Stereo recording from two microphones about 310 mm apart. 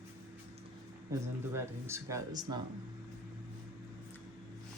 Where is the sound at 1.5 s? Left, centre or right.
Centre.